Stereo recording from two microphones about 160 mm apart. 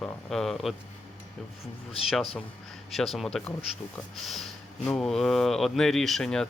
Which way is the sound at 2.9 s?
Centre (ahead or behind).